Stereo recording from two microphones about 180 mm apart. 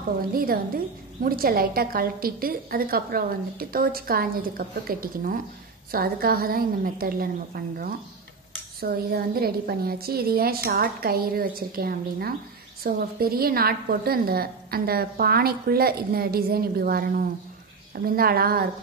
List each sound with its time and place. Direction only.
0.3 s a woman's voice: 55° right (ahead or behind)